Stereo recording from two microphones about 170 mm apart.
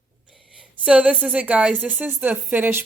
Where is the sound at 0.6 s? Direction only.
5° right (ahead or behind).